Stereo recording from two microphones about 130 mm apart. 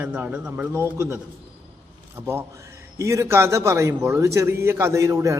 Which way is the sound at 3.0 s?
20° right (ahead or behind).